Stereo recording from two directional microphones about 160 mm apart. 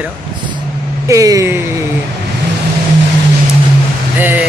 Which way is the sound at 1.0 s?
20° right (ahead or behind).